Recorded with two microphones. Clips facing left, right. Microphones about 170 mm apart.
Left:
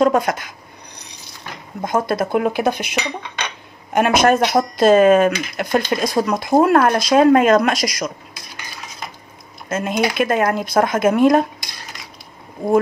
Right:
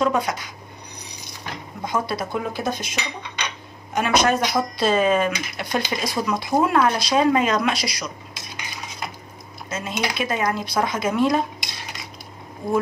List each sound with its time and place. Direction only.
0.0 s speech: 50° left (ahead or behind)
1.9 s speech: 50° left (ahead or behind)
2.4 s speech: 65° left (ahead or behind); by 8.1 s 45° left (ahead or behind)
9.7 s speech: 55° left (ahead or behind)